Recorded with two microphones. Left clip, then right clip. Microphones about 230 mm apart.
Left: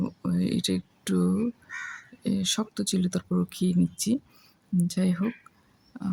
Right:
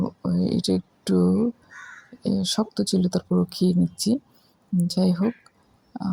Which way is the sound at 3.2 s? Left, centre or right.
Centre.